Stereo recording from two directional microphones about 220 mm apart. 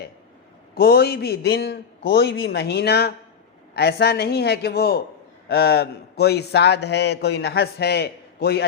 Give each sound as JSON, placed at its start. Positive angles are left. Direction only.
{"t": 0.7, "sound": "a man's voice", "side_deg": 45}